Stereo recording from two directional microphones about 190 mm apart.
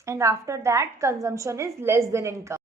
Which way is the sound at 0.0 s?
15° right (ahead or behind).